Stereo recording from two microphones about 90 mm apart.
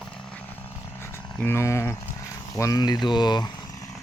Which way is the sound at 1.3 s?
25° left (ahead or behind).